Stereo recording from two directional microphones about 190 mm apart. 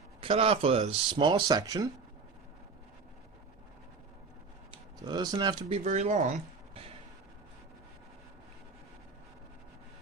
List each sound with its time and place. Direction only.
0.2 s speech: 30° right (ahead or behind)
4.7 s speech: 20° right (ahead or behind)
5.5 s speech: 35° right (ahead or behind)